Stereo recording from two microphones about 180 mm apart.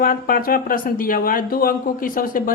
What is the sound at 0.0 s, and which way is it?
Speech, 50° left (ahead or behind).